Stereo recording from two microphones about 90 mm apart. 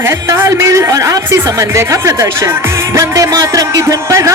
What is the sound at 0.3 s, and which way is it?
Speech, 30° right (ahead or behind).